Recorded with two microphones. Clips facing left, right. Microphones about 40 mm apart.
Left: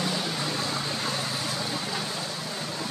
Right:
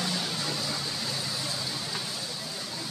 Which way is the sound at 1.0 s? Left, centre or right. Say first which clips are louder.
Left 4 dB; left.